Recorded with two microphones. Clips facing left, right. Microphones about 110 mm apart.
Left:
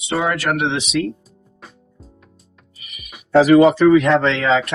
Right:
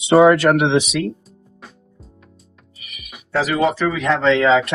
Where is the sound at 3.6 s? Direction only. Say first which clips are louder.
Left 7 dB; centre (ahead or behind).